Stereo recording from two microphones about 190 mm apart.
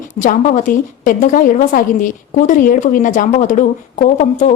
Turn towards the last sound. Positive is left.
turn(degrees=40)  # may be behind; listen again after turning